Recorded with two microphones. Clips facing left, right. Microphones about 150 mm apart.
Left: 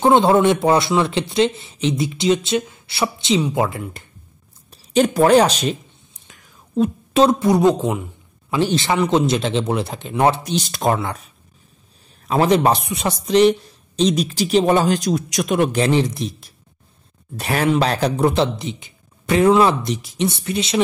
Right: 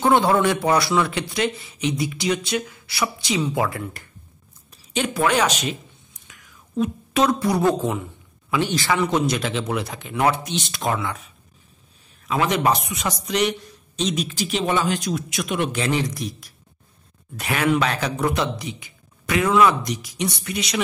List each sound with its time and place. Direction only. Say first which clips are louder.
0.0 s speech: left 4 dB; 25° left (ahead or behind)
4.6 s a sound: left 9 dB; 40° left (ahead or behind); by 8.0 s 20° left (ahead or behind)
8.5 s speech: left 4 dB; 30° left (ahead or behind)
8.8 s speech: left 3 dB; 20° left (ahead or behind); by 11.2 s 35° left (ahead or behind)
12.3 s speech: left 5 dB; 35° left (ahead or behind)